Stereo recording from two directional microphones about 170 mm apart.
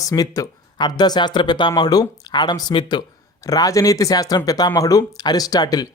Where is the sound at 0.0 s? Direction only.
20° left (ahead or behind).